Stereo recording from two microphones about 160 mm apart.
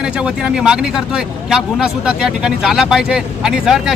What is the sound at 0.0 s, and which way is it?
Speech, 5° right (ahead or behind).